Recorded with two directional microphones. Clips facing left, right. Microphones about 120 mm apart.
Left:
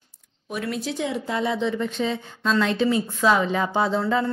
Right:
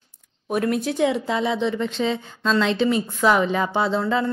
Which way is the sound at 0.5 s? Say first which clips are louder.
Right 6 dB; 50° right (ahead or behind).